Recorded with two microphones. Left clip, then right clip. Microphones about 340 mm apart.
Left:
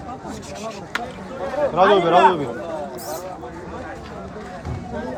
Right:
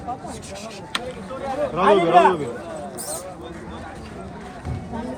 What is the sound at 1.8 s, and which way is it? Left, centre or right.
Speech, left.